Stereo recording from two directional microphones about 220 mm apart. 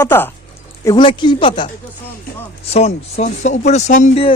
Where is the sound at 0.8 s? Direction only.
20° left (ahead or behind).